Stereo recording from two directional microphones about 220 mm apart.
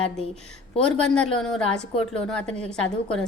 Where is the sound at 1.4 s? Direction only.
5° left (ahead or behind).